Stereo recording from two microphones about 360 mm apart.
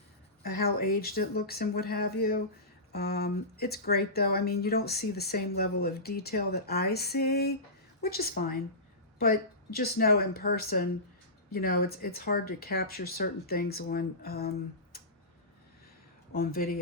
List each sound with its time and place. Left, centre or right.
0.4 s a woman's voice: left
16.3 s speech: left